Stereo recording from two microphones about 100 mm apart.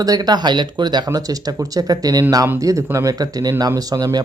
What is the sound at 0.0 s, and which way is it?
Speech, 40° right (ahead or behind).